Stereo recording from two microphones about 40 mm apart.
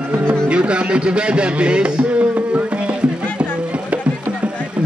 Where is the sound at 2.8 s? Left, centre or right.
Right.